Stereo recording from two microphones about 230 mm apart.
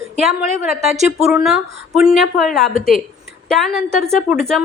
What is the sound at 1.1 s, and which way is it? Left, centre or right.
A woman's voice, centre.